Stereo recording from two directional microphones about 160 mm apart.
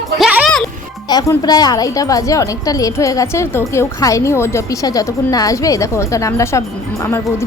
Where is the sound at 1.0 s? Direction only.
25° left (ahead or behind).